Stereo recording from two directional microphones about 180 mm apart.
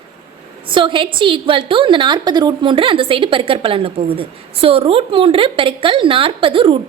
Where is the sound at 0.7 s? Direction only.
25° right (ahead or behind).